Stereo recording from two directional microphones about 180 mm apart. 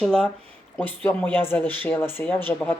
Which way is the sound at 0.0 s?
5° left (ahead or behind).